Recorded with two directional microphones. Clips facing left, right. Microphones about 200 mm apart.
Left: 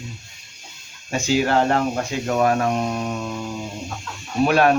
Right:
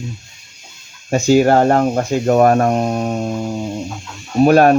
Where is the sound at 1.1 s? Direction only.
45° right (ahead or behind).